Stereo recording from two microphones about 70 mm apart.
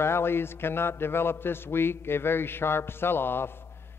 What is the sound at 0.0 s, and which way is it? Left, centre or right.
A man's voice, left.